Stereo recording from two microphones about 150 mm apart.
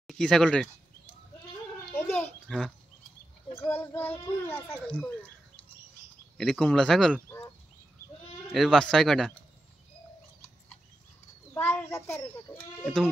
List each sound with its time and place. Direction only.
0.0 s speech: 5° left (ahead or behind)
2.0 s a sound: 15° left (ahead or behind)
2.4 s speech: centre (ahead or behind)
3.5 s a child's voice: 15° left (ahead or behind)
6.3 s speech: 5° left (ahead or behind)
8.5 s speech: centre (ahead or behind)
11.5 s a child's voice: 15° left (ahead or behind)
12.8 s speech: centre (ahead or behind)